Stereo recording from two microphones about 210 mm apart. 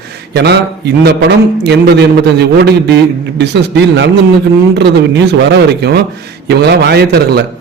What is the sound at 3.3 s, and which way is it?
A man's voice, 55° right (ahead or behind).